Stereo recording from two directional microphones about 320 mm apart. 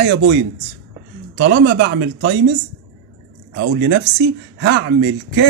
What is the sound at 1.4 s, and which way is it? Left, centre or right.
Speech, right.